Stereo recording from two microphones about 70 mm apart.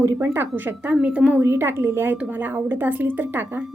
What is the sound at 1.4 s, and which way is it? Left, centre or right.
A woman's voice, right.